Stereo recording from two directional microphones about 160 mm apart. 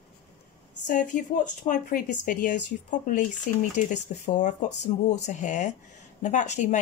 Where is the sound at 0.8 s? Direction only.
55° left (ahead or behind).